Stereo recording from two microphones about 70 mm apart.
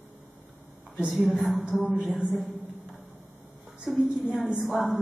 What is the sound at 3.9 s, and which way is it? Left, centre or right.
A woman's voice, centre.